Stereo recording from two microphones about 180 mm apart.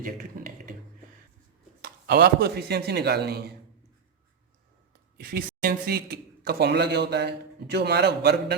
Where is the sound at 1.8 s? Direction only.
60° right (ahead or behind).